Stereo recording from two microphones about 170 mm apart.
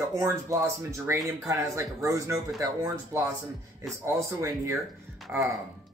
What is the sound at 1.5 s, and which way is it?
A man's voice, 20° right (ahead or behind).